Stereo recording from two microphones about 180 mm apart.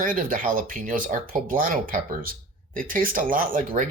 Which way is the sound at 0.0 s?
50° right (ahead or behind).